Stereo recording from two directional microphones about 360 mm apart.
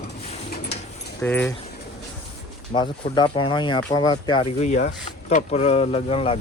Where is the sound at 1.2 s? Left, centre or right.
Centre.